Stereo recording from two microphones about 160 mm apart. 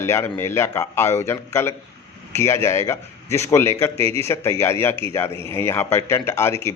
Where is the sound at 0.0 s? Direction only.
15° left (ahead or behind).